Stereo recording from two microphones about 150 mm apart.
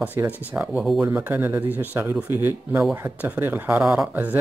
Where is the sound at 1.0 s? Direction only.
15° right (ahead or behind).